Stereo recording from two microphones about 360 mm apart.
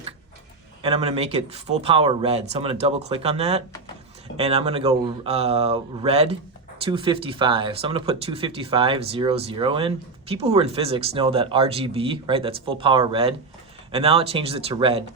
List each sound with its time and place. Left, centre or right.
0.8 s speech: centre